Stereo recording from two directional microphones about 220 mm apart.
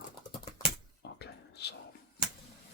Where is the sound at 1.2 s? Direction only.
50° left (ahead or behind).